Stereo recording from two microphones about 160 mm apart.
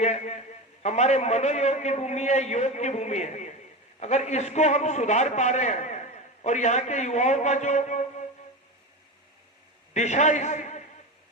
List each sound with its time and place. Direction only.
0.0 s a man's voice: 45° left (ahead or behind)
9.9 s a man's voice: 45° left (ahead or behind)